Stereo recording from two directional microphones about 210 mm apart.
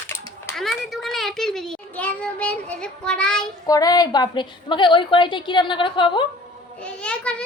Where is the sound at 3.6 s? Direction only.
15° left (ahead or behind).